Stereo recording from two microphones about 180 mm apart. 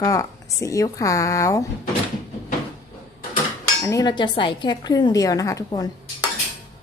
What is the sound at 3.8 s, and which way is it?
Speech, 20° left (ahead or behind).